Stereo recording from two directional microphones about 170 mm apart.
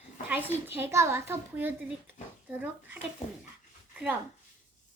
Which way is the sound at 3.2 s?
35° left (ahead or behind).